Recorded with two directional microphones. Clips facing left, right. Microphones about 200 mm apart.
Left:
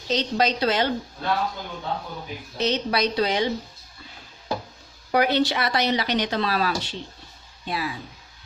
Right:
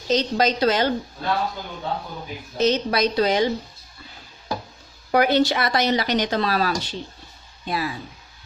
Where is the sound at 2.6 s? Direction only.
45° right (ahead or behind).